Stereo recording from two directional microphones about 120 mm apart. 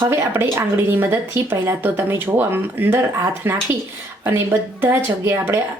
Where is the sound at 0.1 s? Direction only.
20° right (ahead or behind).